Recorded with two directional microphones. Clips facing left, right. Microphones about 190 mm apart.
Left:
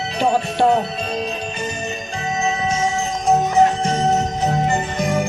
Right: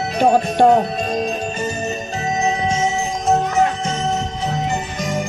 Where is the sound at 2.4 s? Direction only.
30° right (ahead or behind).